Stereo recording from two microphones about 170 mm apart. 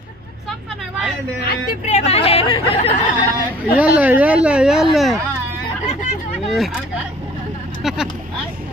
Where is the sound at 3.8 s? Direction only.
10° right (ahead or behind).